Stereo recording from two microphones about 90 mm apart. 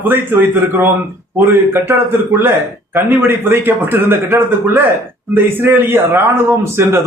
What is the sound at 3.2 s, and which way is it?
A man's voice, 25° right (ahead or behind).